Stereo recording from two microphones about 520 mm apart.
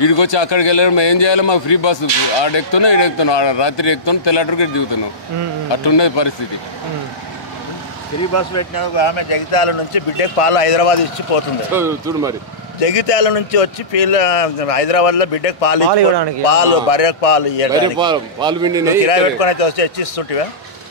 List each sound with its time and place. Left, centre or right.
0.0 s a man's voice: left
8.4 s speech: left
8.9 s a man's voice: left
11.7 s speech: centre
12.8 s a man's voice: left
17.9 s speech: centre
19.0 s a man's voice: left